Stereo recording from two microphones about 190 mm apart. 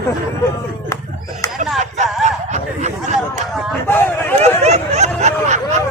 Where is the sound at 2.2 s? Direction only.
35° right (ahead or behind).